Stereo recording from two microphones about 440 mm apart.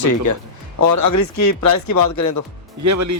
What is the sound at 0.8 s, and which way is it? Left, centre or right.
Speech, left.